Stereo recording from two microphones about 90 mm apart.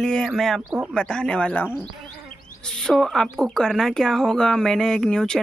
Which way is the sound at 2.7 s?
10° left (ahead or behind).